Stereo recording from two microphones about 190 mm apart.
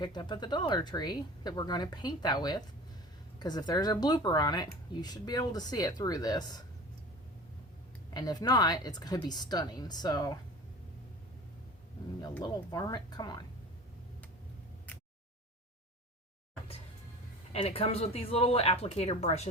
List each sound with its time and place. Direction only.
0.0 s speech: 25° left (ahead or behind)
8.1 s speech: 20° left (ahead or behind)
12.4 s speech: 20° left (ahead or behind)
17.5 s speech: 30° left (ahead or behind)